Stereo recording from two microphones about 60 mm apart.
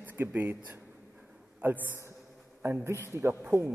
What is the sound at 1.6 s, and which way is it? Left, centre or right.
Speech, right.